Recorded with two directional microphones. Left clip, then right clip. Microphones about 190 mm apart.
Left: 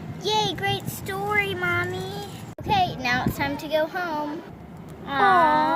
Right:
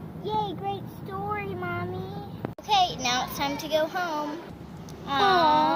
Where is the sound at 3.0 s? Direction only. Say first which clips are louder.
Left 2 dB; 30° left (ahead or behind).